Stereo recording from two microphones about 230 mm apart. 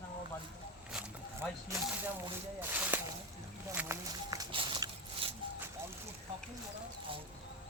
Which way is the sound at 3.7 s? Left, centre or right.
Centre.